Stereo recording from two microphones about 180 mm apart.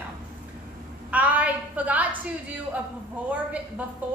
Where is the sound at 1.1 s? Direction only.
10° right (ahead or behind).